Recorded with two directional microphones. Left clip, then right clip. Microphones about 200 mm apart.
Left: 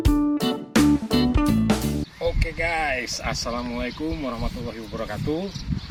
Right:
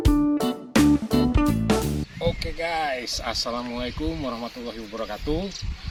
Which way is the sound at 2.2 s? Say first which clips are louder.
Left 1 dB; 5° left (ahead or behind).